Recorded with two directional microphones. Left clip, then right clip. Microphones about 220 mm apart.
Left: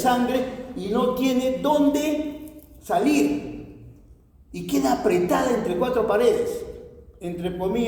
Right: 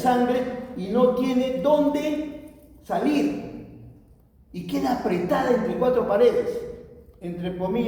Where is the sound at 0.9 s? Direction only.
60° left (ahead or behind).